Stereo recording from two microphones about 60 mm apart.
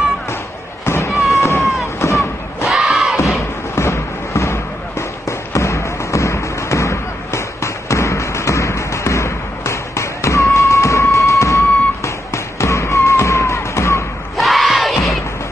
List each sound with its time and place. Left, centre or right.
0.8 s fireworks: left
1.3 s boat: left
2.0 s a sound: left
2.7 s crowd: centre
3.7 s fireworks: left
5.5 s thump: left
14.3 s crowd: centre